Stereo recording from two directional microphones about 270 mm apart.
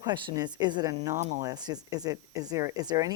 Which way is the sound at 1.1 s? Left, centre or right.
Right.